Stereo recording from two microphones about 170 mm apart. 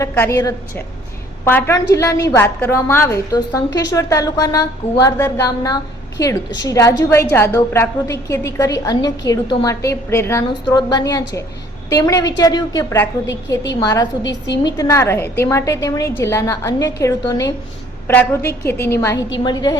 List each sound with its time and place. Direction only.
0.0 s a woman's voice: 15° left (ahead or behind)
14.3 s a woman's voice: 90° left
14.6 s a woman's voice: 20° left (ahead or behind)